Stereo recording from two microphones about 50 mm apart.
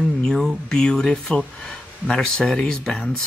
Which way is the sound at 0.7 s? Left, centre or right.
Centre.